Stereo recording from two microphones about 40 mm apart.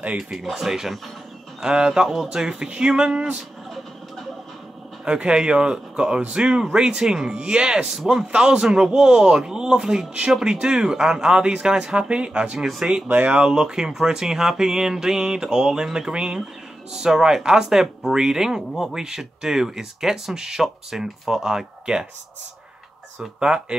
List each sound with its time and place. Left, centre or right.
0.3 s speech: centre
5.0 s speech: right
12.5 s speech: centre
13.3 s speech: right
16.9 s speech: centre
23.4 s speech: right